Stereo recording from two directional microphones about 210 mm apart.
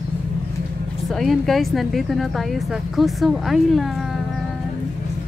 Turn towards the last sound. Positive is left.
turn(degrees=0)  # may be behind; listen again after turning